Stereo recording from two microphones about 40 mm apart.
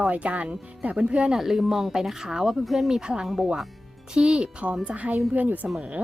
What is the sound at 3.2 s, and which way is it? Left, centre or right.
Speech, centre.